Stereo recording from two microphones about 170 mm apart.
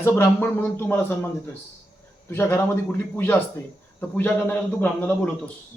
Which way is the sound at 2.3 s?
15° left (ahead or behind).